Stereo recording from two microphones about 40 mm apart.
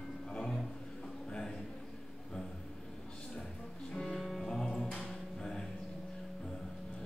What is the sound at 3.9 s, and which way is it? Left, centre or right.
Music, centre.